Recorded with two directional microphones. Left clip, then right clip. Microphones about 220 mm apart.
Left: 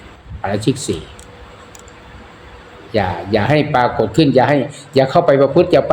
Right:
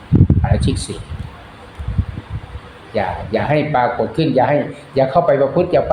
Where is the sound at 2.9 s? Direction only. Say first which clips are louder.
Left 2 dB; 40° left (ahead or behind).